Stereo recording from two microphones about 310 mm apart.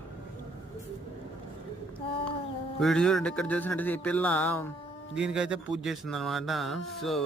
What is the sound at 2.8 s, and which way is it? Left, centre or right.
Speech, centre.